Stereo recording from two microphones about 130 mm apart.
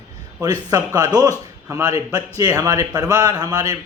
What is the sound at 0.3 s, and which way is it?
A man's voice, 25° right (ahead or behind).